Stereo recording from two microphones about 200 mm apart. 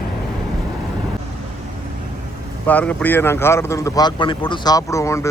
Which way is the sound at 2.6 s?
5° left (ahead or behind).